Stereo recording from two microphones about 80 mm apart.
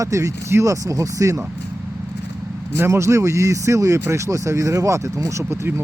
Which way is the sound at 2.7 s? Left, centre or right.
Right.